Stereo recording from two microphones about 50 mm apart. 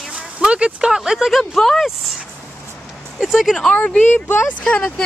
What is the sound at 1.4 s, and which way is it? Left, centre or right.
Speech, centre.